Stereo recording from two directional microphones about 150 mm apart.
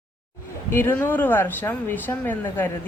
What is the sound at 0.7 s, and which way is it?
Speech, 15° left (ahead or behind).